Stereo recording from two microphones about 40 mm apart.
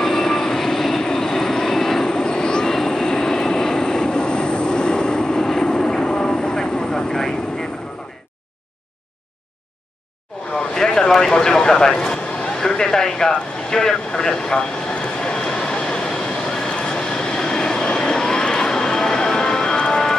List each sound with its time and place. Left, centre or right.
0.0 s train: centre
2.7 s vehicle: centre
10.5 s a sound: centre
15.8 s vehicle: left